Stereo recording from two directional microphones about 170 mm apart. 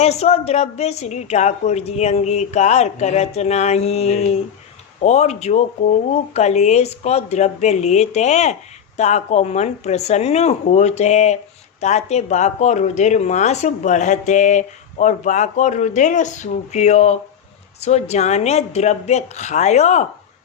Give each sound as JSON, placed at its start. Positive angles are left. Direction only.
{"t": 0.0, "sound": "a woman's voice", "side_deg": 40}